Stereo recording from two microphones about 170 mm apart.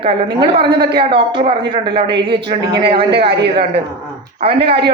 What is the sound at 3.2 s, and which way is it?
Speech, 75° right (ahead or behind).